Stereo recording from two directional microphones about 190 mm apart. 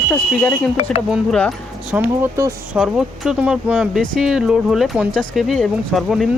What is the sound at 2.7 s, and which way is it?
Speech, 5° right (ahead or behind).